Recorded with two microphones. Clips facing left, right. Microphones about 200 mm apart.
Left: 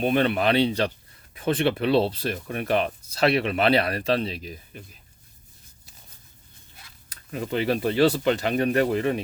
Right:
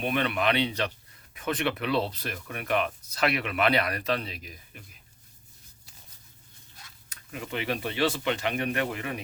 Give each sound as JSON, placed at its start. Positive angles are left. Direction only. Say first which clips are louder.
{"t": 0.0, "sound": "speech", "louder": "left 5 dB", "side_deg": 30}
{"t": 7.1, "sound": "speech", "louder": "left 7 dB", "side_deg": 35}